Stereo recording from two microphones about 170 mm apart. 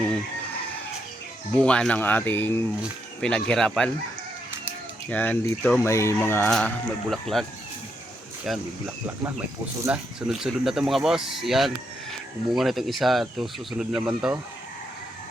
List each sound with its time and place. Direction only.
1.5 s speech: 5° left (ahead or behind)
5.0 s speech: 10° left (ahead or behind)
6.5 s speech: 5° left (ahead or behind)
8.5 s speech: centre (ahead or behind)
9.8 s speech: 5° right (ahead or behind)